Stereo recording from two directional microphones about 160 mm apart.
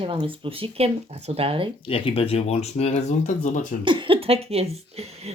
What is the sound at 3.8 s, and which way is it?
Speech, 30° right (ahead or behind).